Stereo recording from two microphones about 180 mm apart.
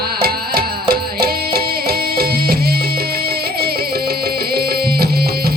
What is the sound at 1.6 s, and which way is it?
Music, 60° right (ahead or behind).